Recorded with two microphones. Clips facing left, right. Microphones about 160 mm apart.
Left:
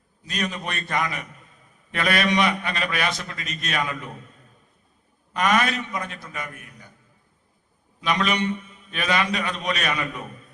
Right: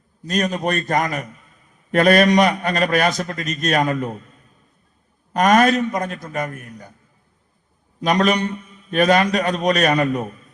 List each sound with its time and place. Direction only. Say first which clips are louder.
0.3 s a man's voice: right 9 dB; 45° right (ahead or behind)
5.3 s a man's voice: right 8 dB; 45° right (ahead or behind)
8.0 s a man's voice: right 6 dB; 45° right (ahead or behind)